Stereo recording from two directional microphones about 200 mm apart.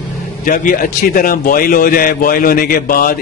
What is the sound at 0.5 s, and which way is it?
A man's voice, 40° left (ahead or behind).